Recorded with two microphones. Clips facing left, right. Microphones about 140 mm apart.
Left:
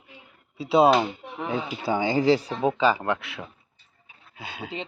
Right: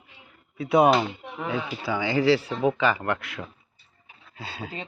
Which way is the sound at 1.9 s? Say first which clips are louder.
Left 1 dB; 50° left (ahead or behind).